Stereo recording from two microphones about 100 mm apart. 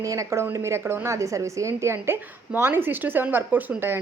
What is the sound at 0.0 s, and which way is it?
A woman's voice, 35° right (ahead or behind).